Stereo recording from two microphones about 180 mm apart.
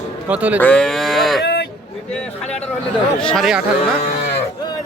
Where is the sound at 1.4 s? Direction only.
60° left (ahead or behind).